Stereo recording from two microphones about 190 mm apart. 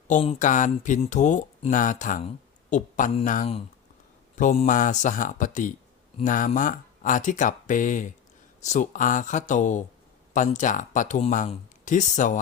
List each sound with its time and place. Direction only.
0.3 s speech: 40° left (ahead or behind)